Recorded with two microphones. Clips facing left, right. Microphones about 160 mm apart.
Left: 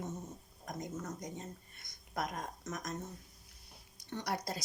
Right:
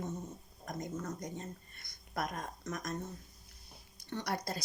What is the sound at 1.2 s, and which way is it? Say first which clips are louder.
Speech: right 2 dB; 15° left (ahead or behind).